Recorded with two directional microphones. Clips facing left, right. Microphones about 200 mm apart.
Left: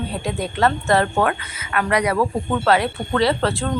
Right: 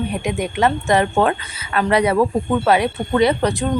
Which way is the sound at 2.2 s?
15° right (ahead or behind).